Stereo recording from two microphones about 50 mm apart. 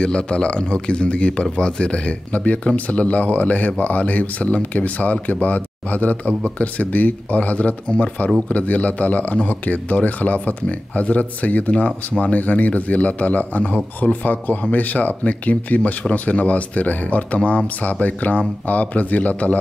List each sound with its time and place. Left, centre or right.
0.0 s a man's voice: centre